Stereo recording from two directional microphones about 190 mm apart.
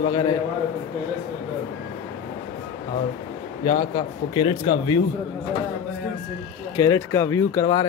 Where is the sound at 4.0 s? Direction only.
25° left (ahead or behind).